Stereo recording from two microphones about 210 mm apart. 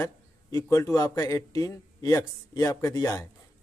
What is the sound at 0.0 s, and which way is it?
A man's voice, 15° left (ahead or behind).